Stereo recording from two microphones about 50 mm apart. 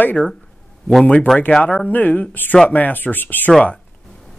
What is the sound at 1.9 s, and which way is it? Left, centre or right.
Speech, left.